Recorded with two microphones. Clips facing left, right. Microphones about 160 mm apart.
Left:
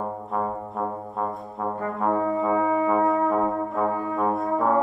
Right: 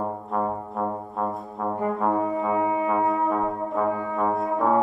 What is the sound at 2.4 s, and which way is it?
Brass instrument, 20° right (ahead or behind).